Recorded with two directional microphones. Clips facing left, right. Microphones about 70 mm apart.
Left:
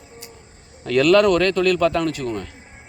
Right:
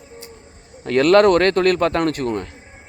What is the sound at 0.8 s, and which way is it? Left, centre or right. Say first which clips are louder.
A man's voice: right 2 dB; right.